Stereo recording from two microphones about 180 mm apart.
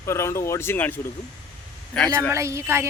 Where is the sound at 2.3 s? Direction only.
15° right (ahead or behind).